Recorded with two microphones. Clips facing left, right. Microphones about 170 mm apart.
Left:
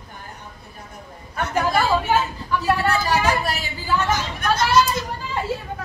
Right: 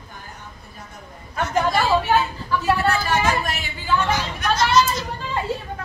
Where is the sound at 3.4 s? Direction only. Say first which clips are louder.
Left 1 dB; 35° left (ahead or behind).